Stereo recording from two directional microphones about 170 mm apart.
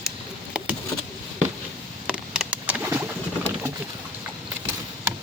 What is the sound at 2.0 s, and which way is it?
Bird, 5° right (ahead or behind).